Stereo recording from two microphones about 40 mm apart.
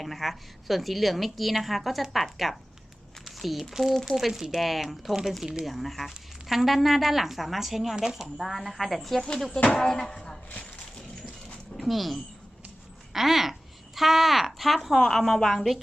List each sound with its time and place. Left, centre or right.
0.0 s a woman's voice: centre
4.3 s a woman's voice: centre
10.9 s a sound: centre
11.8 s speech: centre